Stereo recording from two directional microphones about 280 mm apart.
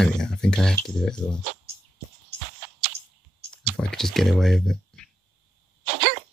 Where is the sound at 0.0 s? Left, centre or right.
Centre.